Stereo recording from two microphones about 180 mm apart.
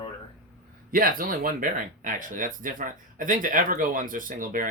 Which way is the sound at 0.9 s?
50° right (ahead or behind).